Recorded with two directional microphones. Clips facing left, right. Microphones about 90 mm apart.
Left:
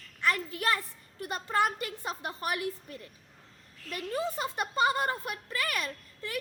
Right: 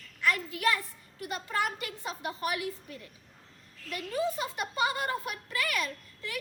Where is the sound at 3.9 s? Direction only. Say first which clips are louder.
Right 1 dB; 35° left (ahead or behind).